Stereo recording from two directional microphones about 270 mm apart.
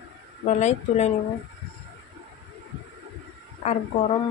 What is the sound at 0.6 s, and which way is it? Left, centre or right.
Speech, left.